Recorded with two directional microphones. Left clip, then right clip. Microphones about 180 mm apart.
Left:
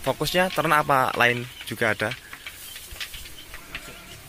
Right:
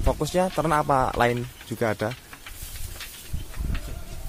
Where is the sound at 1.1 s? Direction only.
15° right (ahead or behind).